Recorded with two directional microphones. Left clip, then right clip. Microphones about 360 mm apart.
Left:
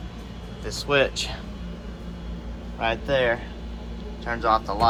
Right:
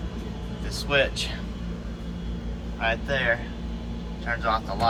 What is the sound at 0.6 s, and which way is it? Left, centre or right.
Speech, centre.